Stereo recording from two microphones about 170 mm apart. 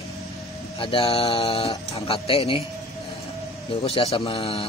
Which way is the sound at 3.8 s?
35° left (ahead or behind).